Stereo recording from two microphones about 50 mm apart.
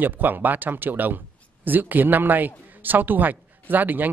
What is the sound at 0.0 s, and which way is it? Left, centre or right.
Speech, right.